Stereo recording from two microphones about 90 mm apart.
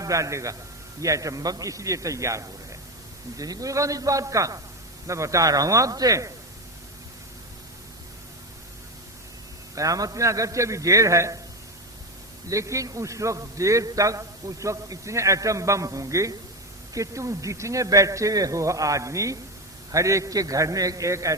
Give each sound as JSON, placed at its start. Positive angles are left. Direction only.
{"t": 0.0, "sound": "a man's voice", "side_deg": -35}
{"t": 9.7, "sound": "a man's voice", "side_deg": -40}
{"t": 12.5, "sound": "a man's voice", "side_deg": -35}